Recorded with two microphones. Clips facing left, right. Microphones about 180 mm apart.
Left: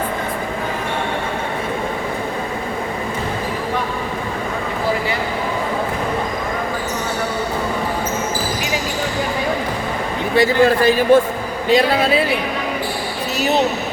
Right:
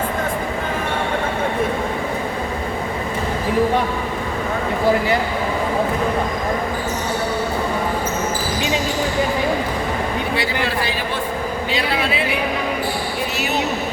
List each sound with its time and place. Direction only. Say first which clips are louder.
10.3 s a man's voice: left 13 dB; 45° left (ahead or behind)